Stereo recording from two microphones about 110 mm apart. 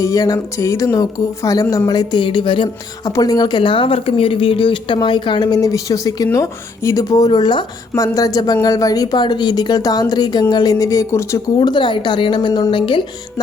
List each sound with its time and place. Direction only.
0.0 s speech: 30° left (ahead or behind); by 2.6 s 50° left (ahead or behind)
3.0 s speech: 35° left (ahead or behind)
7.9 s speech: 30° left (ahead or behind)
11.6 s speech: 45° left (ahead or behind)